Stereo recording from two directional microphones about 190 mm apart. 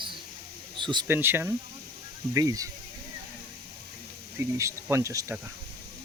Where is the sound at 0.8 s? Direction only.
25° right (ahead or behind).